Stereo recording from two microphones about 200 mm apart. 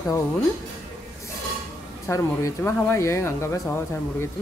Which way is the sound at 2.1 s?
15° left (ahead or behind).